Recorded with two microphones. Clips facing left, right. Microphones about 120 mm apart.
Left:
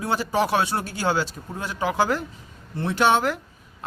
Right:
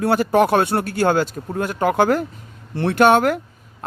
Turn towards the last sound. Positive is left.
turn(degrees=-55)  # may be behind; listen again after turning